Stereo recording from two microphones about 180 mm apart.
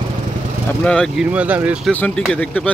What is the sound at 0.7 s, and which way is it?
Speech, 5° left (ahead or behind).